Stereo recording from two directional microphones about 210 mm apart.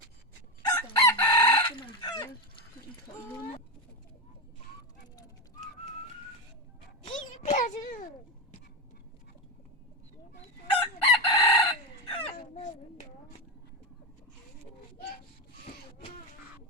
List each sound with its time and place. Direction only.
0.6 s chicken: 15° left (ahead or behind)
1.6 s chicken: 20° left (ahead or behind)
7.0 s a sound: 35° left (ahead or behind)
10.8 s chicken: 25° left (ahead or behind)